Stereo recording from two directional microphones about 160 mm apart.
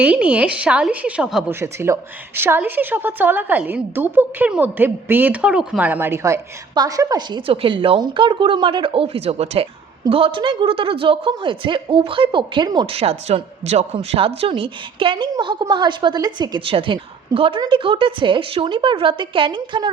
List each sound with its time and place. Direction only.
0.0 s a woman's voice: 10° right (ahead or behind)
1.5 s a woman's voice: 15° right (ahead or behind)